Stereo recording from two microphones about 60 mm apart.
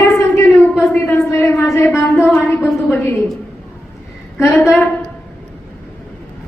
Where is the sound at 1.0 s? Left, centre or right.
Left.